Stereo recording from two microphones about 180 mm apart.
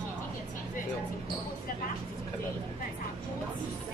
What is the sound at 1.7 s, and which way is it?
Speech, 55° left (ahead or behind).